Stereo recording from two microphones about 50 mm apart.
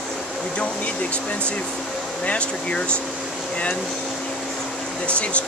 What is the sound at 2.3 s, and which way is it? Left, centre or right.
Speech, left.